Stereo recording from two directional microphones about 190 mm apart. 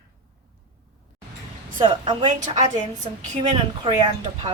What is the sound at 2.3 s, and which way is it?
Speech, 40° right (ahead or behind).